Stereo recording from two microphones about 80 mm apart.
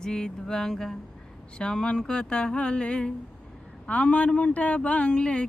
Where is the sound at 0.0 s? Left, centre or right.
Centre.